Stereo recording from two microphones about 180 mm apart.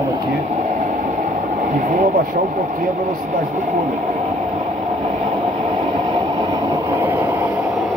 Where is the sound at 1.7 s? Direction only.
45° right (ahead or behind).